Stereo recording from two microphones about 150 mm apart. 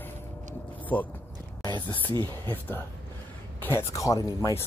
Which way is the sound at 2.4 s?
15° left (ahead or behind).